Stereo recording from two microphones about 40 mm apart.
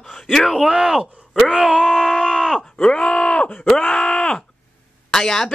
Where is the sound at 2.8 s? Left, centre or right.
Centre.